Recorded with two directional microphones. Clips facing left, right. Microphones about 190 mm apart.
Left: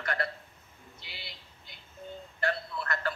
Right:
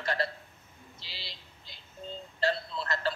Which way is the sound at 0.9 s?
90° right.